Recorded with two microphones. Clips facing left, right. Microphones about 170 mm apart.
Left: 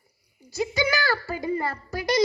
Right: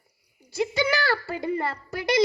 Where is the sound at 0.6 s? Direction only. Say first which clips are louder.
Right 1 dB; 30° right (ahead or behind).